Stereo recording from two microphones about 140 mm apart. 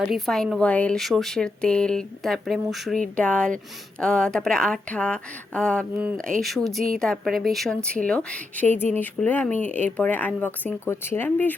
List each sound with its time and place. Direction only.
0.1 s a woman's voice: centre (ahead or behind)